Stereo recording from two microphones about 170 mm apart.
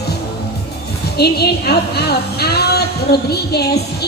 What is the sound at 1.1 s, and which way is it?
A woman's voice, 70° left (ahead or behind).